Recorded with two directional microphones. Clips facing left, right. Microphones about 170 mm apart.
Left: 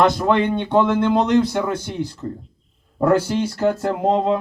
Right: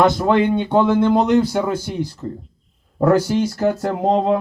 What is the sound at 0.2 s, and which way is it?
A man's voice, 10° right (ahead or behind).